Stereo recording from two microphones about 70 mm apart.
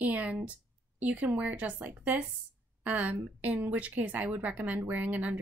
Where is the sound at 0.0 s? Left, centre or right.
Centre.